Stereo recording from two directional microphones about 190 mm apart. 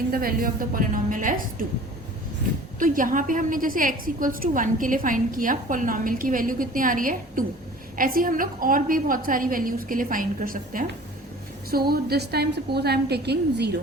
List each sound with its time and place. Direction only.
0.1 s a woman's voice: 50° right (ahead or behind)
2.7 s a woman's voice: 45° right (ahead or behind)